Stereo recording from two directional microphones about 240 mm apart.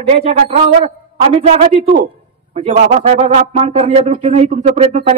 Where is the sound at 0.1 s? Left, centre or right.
Right.